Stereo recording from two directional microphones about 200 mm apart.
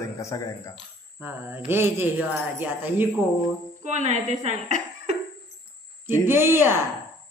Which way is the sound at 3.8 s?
35° right (ahead or behind).